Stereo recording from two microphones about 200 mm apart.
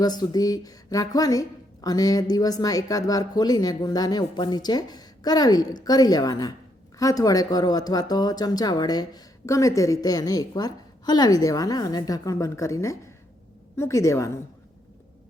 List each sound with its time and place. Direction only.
0.0 s a woman's voice: 20° left (ahead or behind)